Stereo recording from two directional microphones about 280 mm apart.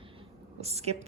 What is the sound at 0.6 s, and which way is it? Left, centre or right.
Speech, right.